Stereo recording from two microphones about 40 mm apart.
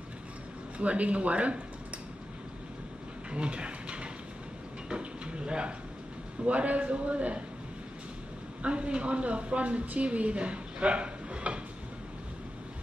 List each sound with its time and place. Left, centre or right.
0.7 s a man's voice: right
3.3 s a sound: right
6.4 s a man's voice: right
8.6 s a woman's voice: right